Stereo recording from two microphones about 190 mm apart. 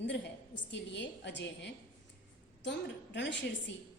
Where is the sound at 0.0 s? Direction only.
70° left (ahead or behind).